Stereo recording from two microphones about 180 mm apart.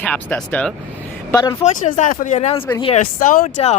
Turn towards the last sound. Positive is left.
turn(degrees=40)  # may be behind; listen again after turning